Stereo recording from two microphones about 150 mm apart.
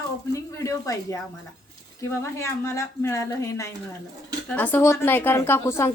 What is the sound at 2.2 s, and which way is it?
A woman's voice, 20° left (ahead or behind).